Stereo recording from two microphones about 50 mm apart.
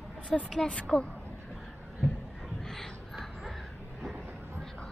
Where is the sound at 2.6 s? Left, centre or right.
Centre.